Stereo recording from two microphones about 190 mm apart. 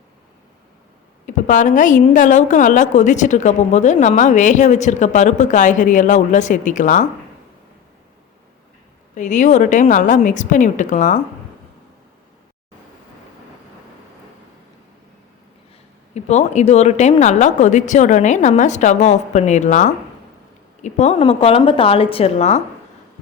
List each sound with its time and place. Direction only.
1.3 s a woman's voice: 40° left (ahead or behind)
9.1 s a woman's voice: 40° left (ahead or behind)
16.1 s a woman's voice: 35° left (ahead or behind)